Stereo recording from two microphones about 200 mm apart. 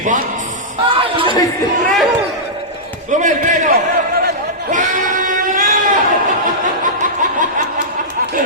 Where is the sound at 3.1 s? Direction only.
40° right (ahead or behind).